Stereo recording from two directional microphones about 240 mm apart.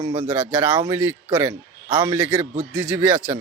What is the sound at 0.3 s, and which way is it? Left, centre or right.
Speech, centre.